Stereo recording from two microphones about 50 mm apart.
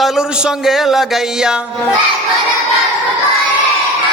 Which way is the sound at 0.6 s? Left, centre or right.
Centre.